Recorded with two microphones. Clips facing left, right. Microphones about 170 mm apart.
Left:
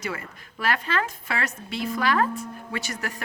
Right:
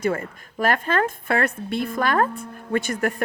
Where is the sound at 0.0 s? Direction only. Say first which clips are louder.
Right 9 dB; 50° right (ahead or behind).